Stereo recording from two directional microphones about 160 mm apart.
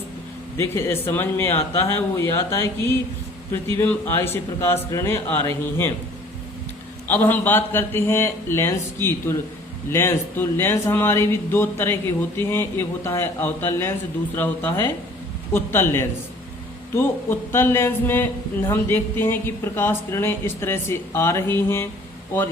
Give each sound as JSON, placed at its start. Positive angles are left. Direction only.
{"t": 0.5, "sound": "speech", "side_deg": 15}
{"t": 7.1, "sound": "speech", "side_deg": 10}